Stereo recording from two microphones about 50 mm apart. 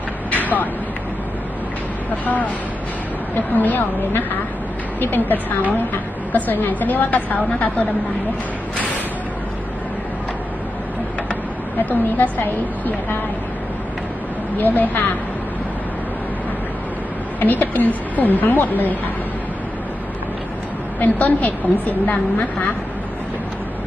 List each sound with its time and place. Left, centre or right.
0.3 s vehicle: left
2.2 s a woman's voice: left
11.8 s a woman's voice: left
14.6 s a woman's voice: left
17.4 s a woman's voice: left
21.0 s a woman's voice: left